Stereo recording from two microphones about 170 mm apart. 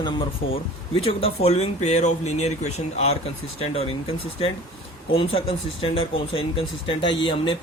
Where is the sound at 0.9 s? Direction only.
35° left (ahead or behind).